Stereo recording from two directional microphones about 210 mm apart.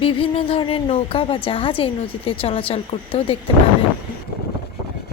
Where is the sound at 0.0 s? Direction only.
25° left (ahead or behind).